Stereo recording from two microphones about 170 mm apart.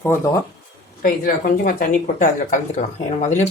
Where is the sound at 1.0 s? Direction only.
55° left (ahead or behind).